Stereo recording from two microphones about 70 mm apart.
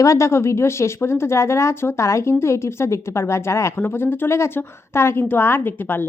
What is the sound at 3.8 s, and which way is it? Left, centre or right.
A woman's voice, left.